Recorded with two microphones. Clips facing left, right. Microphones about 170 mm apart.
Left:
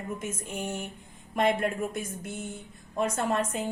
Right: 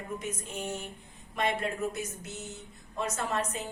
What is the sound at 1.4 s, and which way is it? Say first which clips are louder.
A woman's voice: left 5 dB; 55° left (ahead or behind).